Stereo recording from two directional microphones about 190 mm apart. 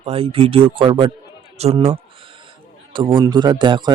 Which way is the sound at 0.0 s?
30° right (ahead or behind).